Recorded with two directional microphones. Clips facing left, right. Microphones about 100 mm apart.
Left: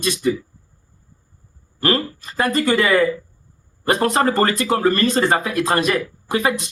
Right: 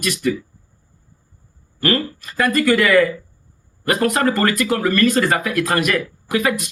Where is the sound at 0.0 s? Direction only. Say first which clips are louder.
Left 1 dB; 25° left (ahead or behind).